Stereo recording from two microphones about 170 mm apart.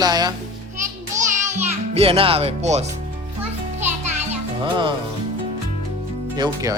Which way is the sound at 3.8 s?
45° right (ahead or behind).